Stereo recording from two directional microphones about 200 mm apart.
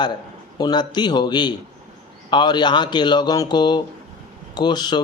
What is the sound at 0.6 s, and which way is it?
Speech, 20° left (ahead or behind).